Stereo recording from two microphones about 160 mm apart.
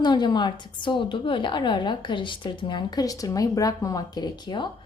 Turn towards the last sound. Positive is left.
turn(degrees=25)  # may be behind; listen again after turning